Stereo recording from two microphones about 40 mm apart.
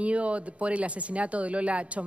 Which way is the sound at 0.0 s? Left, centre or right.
Right.